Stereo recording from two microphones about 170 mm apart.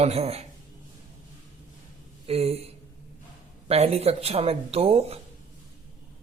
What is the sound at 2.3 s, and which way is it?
Speech, 35° right (ahead or behind).